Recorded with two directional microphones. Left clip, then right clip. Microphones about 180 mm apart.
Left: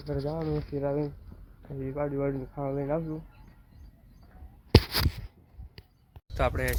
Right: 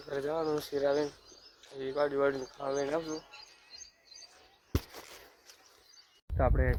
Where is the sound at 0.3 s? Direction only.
30° right (ahead or behind).